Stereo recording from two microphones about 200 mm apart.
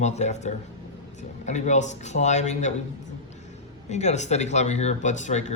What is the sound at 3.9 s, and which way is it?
A man's voice, 35° left (ahead or behind).